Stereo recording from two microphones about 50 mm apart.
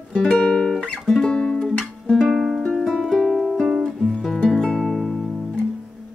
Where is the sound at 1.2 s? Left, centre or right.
Centre.